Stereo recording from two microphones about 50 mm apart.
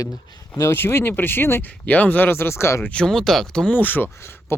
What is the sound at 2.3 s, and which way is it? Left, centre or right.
Speech, left.